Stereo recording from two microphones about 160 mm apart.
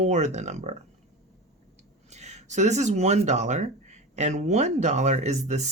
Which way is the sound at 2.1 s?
45° right (ahead or behind).